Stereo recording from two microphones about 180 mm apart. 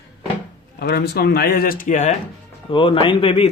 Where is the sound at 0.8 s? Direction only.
65° left (ahead or behind); by 2.1 s 40° left (ahead or behind).